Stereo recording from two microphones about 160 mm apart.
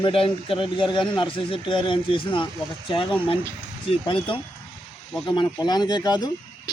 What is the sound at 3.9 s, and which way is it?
A man's voice, 35° left (ahead or behind).